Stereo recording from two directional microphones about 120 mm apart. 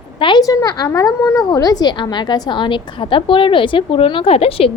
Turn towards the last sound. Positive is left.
turn(degrees=55)  # may be behind; listen again after turning